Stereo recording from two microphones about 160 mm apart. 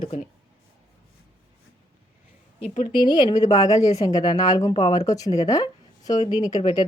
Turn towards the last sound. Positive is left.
turn(degrees=25)  # may be behind; listen again after turning